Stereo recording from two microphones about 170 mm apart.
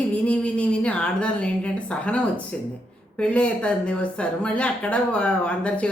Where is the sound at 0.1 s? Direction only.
10° left (ahead or behind).